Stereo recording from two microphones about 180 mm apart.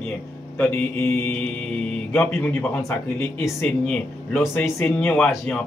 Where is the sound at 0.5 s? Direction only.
15° left (ahead or behind).